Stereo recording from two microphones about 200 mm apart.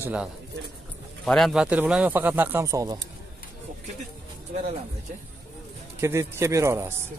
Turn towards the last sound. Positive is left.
turn(degrees=-15)  # may be behind; listen again after turning